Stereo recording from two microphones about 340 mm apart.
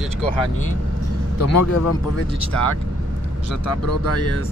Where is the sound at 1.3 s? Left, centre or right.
Left.